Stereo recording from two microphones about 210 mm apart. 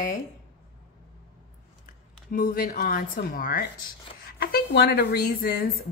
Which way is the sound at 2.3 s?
40° left (ahead or behind).